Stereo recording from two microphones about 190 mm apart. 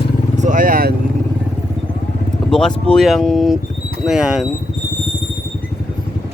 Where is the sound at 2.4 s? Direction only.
5° left (ahead or behind).